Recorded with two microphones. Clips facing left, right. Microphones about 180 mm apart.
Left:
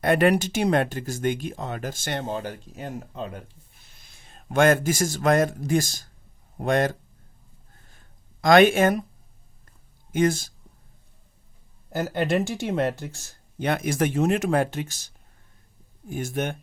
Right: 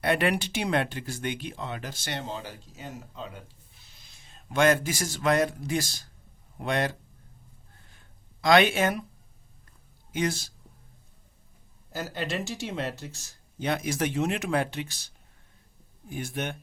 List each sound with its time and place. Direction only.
0.0 s a man's voice: 45° left (ahead or behind)
7.9 s a sound: 50° left (ahead or behind)
10.1 s speech: 50° left (ahead or behind)
11.9 s speech: 55° left (ahead or behind)